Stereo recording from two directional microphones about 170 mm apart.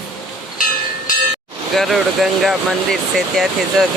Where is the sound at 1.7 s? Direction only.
Centre (ahead or behind).